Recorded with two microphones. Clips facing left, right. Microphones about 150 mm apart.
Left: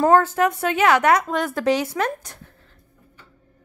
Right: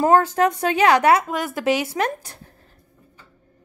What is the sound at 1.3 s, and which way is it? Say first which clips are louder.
Speech: left 1 dB; 5° right (ahead or behind).